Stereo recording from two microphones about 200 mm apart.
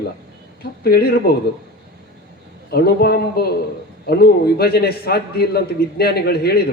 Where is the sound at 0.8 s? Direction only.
50° left (ahead or behind).